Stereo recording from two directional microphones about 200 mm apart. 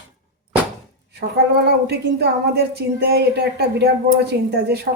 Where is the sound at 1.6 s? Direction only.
55° right (ahead or behind).